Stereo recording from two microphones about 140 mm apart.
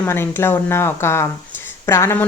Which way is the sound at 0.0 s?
15° left (ahead or behind).